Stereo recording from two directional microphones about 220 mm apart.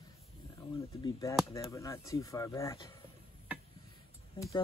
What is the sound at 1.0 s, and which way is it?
Speech, 15° left (ahead or behind).